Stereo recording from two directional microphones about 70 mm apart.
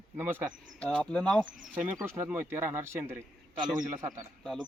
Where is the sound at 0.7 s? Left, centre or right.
Centre.